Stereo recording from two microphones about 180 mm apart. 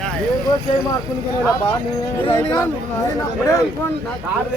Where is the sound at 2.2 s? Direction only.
25° left (ahead or behind).